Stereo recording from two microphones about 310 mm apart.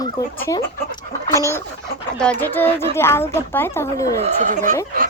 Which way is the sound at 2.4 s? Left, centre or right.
Centre.